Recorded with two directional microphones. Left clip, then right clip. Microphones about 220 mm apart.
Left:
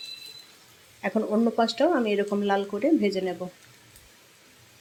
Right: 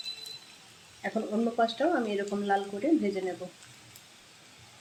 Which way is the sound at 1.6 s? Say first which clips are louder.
Left 3 dB; 30° left (ahead or behind).